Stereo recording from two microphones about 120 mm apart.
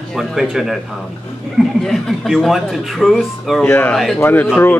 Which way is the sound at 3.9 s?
Centre (ahead or behind).